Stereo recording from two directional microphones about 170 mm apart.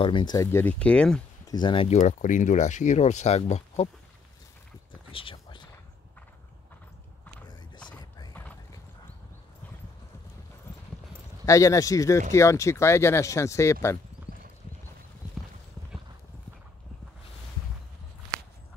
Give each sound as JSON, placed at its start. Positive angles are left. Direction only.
{"t": 0.0, "sound": "speech", "side_deg": 30}
{"t": 1.5, "sound": "speech", "side_deg": 30}
{"t": 5.1, "sound": "a sound", "side_deg": 30}
{"t": 11.4, "sound": "speech", "side_deg": 20}